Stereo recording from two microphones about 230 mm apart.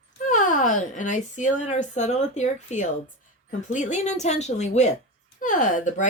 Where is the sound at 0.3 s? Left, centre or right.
Left.